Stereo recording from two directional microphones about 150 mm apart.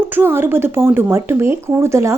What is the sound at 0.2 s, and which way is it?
A woman's voice, 15° right (ahead or behind).